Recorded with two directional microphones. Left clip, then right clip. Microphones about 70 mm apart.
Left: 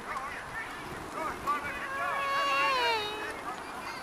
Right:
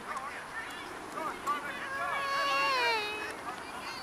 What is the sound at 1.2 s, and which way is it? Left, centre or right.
Boat, centre.